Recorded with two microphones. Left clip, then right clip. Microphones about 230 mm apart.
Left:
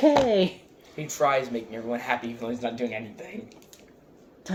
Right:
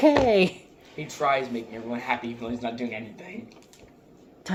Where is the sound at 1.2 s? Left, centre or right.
Left.